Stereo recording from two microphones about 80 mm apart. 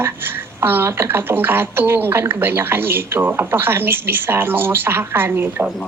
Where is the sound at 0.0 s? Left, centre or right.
Right.